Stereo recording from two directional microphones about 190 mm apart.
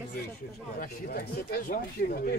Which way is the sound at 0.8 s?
50° left (ahead or behind).